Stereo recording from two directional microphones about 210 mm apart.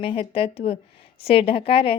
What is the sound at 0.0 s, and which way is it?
A woman's voice, 25° left (ahead or behind).